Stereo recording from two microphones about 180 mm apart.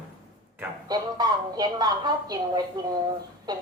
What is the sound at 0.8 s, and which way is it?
Speech, 20° right (ahead or behind).